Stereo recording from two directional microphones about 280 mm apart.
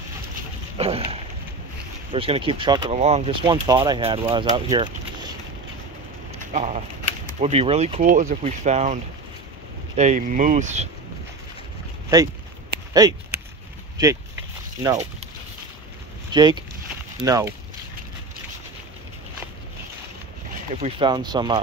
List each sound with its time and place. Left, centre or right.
0.7 s a sound: right
2.1 s speech: centre
6.4 s speech: right
13.0 s speech: centre
16.3 s speech: centre
20.7 s speech: centre